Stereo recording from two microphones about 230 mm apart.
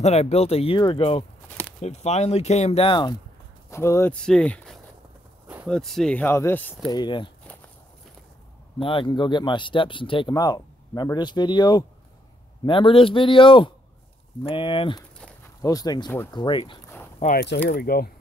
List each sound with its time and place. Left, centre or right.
0.0 s speech: left; by 7.0 s centre
7.0 s speech: left
8.7 s speech: left
17.2 s speech: left